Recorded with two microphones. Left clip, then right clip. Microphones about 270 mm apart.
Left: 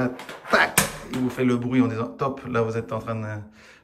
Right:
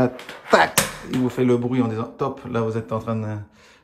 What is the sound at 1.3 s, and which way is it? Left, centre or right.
Speech, centre.